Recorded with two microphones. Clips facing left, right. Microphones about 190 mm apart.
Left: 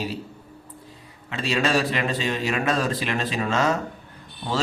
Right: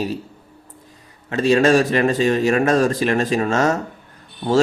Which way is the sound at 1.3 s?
45° right (ahead or behind).